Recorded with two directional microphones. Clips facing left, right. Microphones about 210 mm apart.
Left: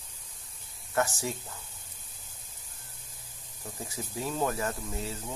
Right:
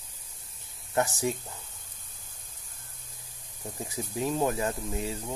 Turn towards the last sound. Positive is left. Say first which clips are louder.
# right 3 dB
turn(degrees=-15)  # may be behind; listen again after turning